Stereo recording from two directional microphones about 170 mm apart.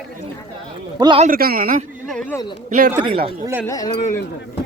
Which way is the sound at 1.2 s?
60° right (ahead or behind).